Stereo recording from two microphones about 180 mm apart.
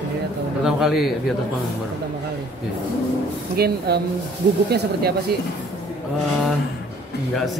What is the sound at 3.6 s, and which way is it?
Speech, 60° right (ahead or behind).